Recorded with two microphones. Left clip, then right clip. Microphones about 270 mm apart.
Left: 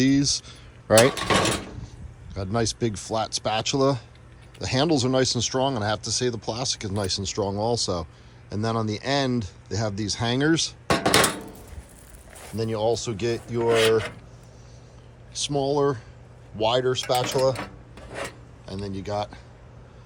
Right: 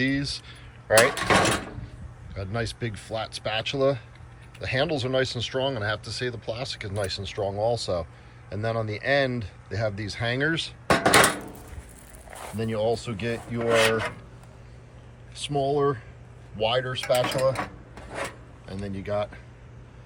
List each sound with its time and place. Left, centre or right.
0.0 s speech: centre
1.1 s cutlery: centre
2.3 s speech: centre
10.8 s a sound: centre
12.5 s speech: centre
15.3 s speech: centre
17.0 s cutlery: centre
18.7 s speech: centre